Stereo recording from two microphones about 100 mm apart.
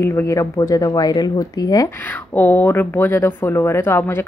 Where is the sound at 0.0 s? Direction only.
25° left (ahead or behind).